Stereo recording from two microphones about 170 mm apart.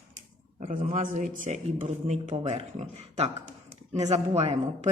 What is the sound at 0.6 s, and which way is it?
A man's voice, 45° right (ahead or behind).